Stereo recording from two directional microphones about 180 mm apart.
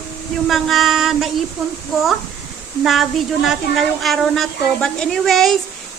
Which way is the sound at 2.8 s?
Centre (ahead or behind).